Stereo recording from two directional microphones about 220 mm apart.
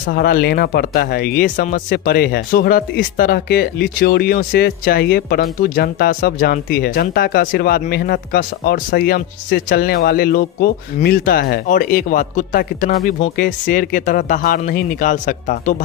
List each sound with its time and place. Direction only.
0.0 s speech: 40° left (ahead or behind)